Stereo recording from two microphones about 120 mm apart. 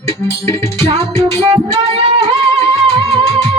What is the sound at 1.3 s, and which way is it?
Music, 55° right (ahead or behind).